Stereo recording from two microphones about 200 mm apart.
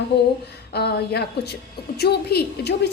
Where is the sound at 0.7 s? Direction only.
55° left (ahead or behind).